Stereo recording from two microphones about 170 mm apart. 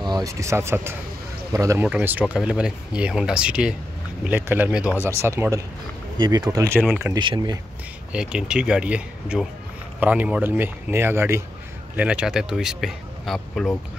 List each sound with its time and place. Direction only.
0.0 s speech: 20° right (ahead or behind)
7.2 s speech: 25° right (ahead or behind)
8.1 s speech: 5° right (ahead or behind)